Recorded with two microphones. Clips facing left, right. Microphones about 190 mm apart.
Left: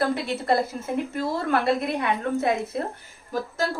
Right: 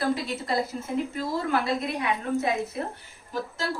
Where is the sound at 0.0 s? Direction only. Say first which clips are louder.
Left 2 dB; 60° left (ahead or behind).